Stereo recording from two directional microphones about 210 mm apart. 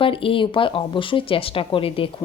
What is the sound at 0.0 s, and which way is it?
Speech, 25° left (ahead or behind).